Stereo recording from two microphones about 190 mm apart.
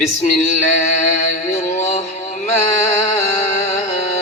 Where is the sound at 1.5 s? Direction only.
35° left (ahead or behind).